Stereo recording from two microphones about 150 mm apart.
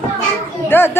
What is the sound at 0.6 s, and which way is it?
Speech, 15° left (ahead or behind).